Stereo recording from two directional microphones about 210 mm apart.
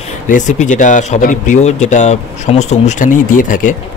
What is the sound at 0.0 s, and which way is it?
Speech, 35° left (ahead or behind).